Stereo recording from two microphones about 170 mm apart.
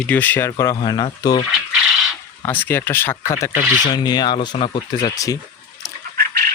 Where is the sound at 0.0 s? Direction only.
10° left (ahead or behind); by 1.5 s 25° left (ahead or behind).